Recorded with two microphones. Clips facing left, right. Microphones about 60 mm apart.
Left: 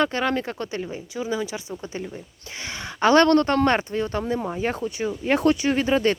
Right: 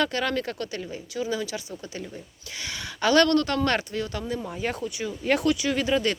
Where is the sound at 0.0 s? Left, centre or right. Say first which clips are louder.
Left 3 dB; left.